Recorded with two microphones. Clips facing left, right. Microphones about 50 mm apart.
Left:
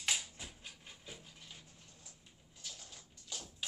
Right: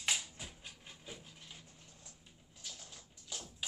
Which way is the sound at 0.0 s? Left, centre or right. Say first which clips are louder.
Even; centre.